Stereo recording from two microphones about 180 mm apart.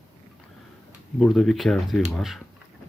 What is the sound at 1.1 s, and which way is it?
Speech, centre (ahead or behind).